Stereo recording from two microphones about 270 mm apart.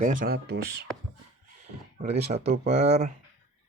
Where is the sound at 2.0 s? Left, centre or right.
Right.